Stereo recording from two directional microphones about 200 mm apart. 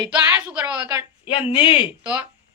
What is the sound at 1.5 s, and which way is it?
Speech, 25° left (ahead or behind).